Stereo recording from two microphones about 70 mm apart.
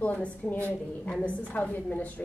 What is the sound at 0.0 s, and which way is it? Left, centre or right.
A woman's voice, left.